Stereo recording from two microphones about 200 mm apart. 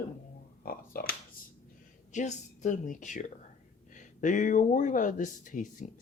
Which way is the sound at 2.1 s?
35° left (ahead or behind).